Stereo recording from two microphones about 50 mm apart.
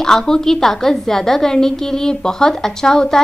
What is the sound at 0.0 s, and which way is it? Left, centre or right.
A woman's voice, centre.